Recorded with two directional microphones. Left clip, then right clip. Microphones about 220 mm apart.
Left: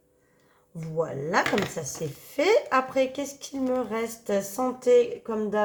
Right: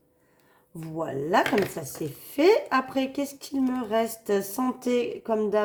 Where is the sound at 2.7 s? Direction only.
40° right (ahead or behind).